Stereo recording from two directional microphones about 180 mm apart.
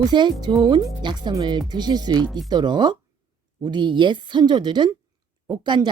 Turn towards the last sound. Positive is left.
turn(degrees=-25)  # may be behind; listen again after turning